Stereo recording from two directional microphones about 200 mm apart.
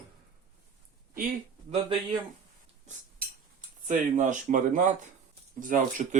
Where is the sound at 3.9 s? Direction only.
40° right (ahead or behind).